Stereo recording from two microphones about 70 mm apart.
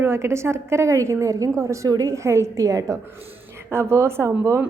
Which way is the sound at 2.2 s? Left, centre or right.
Right.